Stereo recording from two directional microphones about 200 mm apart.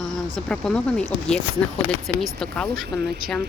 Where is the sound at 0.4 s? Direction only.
5° left (ahead or behind).